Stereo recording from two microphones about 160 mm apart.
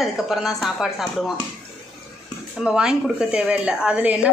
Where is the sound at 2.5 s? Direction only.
5° right (ahead or behind).